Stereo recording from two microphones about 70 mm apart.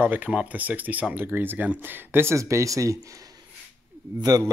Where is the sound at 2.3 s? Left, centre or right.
Right.